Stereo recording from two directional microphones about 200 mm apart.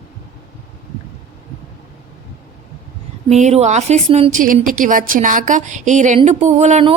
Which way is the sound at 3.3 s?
35° right (ahead or behind).